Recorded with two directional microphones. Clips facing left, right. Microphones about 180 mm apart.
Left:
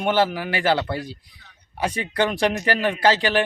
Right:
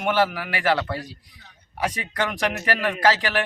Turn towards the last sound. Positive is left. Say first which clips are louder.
# left 2 dB
turn(degrees=25)  # may be behind; listen again after turning